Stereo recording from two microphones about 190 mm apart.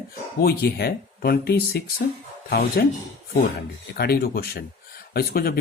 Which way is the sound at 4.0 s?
55° left (ahead or behind).